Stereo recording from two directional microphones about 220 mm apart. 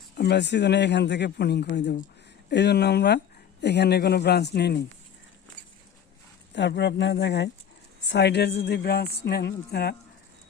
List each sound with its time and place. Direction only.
0.2 s speech: 50° left (ahead or behind)
6.5 s speech: 55° left (ahead or behind)